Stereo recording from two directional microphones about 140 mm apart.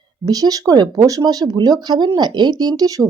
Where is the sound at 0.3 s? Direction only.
25° right (ahead or behind).